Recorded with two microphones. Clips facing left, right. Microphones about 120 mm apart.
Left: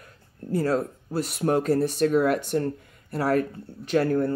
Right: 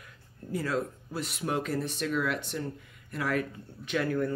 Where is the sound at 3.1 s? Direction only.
40° left (ahead or behind).